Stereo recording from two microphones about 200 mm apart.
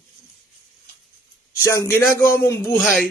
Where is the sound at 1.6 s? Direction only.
15° left (ahead or behind).